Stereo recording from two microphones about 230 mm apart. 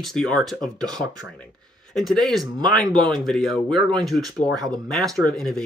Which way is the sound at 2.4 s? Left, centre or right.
Centre.